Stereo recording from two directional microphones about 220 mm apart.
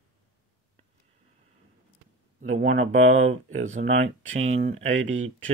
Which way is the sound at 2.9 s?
65° right (ahead or behind).